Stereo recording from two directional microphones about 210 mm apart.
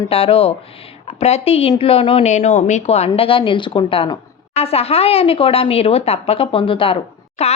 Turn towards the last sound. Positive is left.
turn(degrees=30)  # may be behind; listen again after turning